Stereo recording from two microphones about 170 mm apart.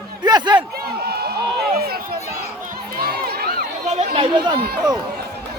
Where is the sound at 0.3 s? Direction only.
25° right (ahead or behind).